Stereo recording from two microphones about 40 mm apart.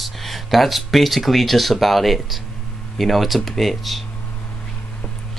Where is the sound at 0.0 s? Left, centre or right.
Centre.